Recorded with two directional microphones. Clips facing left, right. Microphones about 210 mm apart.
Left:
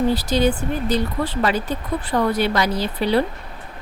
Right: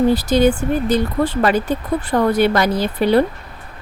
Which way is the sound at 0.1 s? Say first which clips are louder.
Right 4 dB; 50° right (ahead or behind).